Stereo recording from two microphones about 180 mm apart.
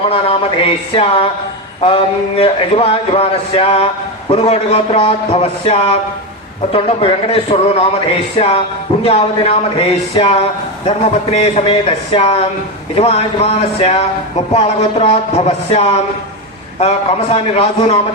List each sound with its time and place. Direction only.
0.1 s speech: 30° left (ahead or behind)
17.3 s speech: 30° left (ahead or behind)